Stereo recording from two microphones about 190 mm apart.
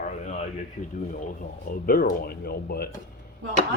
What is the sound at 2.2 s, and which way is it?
Speech, 55° left (ahead or behind).